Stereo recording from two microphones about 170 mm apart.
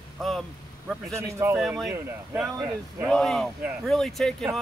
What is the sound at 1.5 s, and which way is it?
Speech, centre (ahead or behind).